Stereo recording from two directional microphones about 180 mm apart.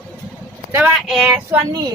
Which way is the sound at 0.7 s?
5° right (ahead or behind).